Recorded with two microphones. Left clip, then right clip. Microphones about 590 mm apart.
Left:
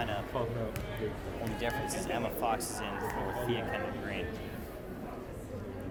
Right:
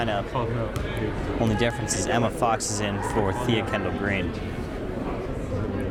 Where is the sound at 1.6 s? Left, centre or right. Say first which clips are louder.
Right 9 dB; right.